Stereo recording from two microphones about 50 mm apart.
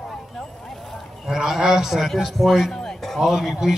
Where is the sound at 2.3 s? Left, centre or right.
Centre.